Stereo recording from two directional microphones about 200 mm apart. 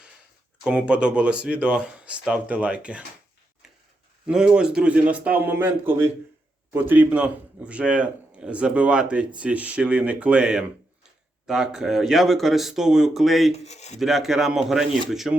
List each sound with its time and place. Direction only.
0.6 s a man's voice: 5° right (ahead or behind)
4.3 s a man's voice: 5° right (ahead or behind)
13.7 s speech: 35° left (ahead or behind)
14.0 s a man's voice: centre (ahead or behind)